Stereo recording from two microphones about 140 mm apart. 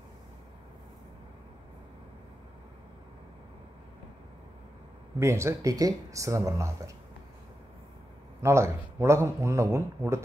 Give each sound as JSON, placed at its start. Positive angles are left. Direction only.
{"t": 5.2, "sound": "speech", "side_deg": -20}
{"t": 8.4, "sound": "speech", "side_deg": -20}